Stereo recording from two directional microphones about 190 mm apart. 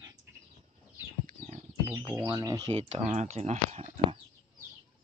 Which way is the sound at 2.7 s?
30° right (ahead or behind).